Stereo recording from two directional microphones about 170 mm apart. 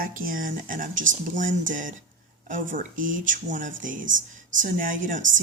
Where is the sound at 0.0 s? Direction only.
55° right (ahead or behind).